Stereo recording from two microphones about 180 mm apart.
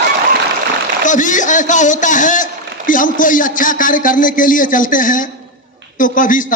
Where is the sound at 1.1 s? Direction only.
45° left (ahead or behind).